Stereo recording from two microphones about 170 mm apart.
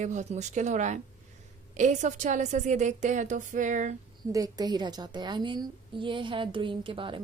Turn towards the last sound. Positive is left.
turn(degrees=-30)  # may be behind; listen again after turning